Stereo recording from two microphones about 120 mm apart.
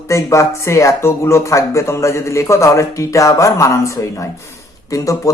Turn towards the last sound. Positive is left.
turn(degrees=25)  # may be behind; listen again after turning